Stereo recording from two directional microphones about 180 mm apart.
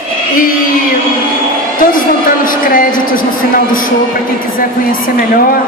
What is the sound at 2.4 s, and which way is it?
Speech, 50° left (ahead or behind).